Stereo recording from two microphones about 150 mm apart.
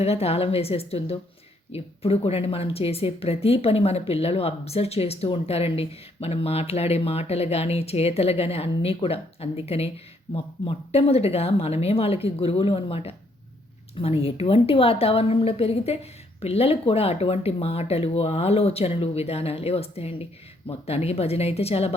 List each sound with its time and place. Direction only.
0.0 s a woman's voice: 45° left (ahead or behind)